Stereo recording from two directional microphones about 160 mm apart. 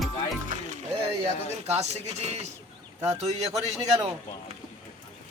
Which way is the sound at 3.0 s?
45° right (ahead or behind).